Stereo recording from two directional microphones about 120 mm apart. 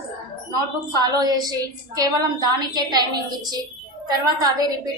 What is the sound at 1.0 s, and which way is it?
A woman's voice, 35° right (ahead or behind).